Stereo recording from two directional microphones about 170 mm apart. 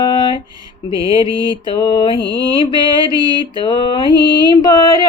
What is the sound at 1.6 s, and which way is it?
Mantra, 30° left (ahead or behind).